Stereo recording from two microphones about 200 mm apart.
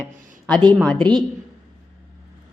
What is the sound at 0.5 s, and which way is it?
Speech, 20° right (ahead or behind).